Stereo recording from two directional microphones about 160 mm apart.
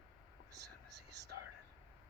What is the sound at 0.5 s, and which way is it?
Whispering, 90° right.